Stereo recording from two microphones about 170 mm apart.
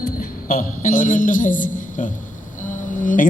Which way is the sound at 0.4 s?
55° left (ahead or behind).